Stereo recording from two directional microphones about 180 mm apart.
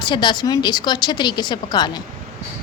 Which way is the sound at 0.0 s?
25° left (ahead or behind).